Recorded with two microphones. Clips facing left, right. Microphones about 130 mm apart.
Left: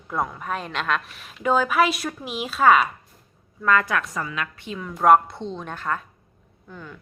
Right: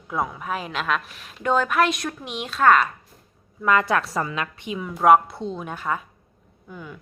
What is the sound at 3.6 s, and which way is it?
Speech, 15° right (ahead or behind).